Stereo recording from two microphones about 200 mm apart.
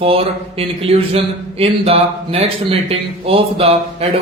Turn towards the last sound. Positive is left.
turn(degrees=-30)  # may be behind; listen again after turning